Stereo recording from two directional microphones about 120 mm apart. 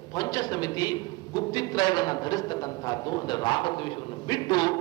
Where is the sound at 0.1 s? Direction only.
30° left (ahead or behind).